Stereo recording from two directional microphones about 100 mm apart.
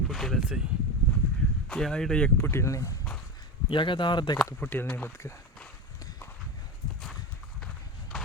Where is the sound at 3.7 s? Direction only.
55° left (ahead or behind).